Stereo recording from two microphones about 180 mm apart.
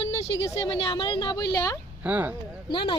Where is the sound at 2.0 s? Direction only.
10° right (ahead or behind).